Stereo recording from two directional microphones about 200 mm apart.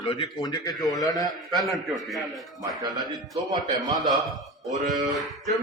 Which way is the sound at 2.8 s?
20° right (ahead or behind).